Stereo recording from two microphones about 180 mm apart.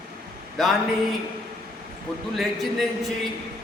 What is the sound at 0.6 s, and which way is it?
Speech, centre (ahead or behind).